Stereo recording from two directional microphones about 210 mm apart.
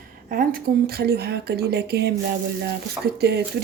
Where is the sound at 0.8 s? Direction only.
50° right (ahead or behind).